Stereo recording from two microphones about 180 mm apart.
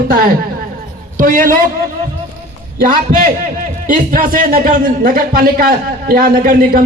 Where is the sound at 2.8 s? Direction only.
50° right (ahead or behind).